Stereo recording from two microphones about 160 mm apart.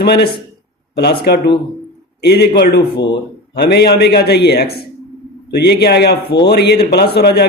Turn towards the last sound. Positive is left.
turn(degrees=90)